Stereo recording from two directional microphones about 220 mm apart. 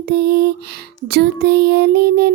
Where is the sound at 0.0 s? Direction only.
45° right (ahead or behind).